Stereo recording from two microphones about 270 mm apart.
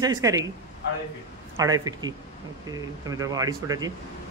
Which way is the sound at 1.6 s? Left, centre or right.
Centre.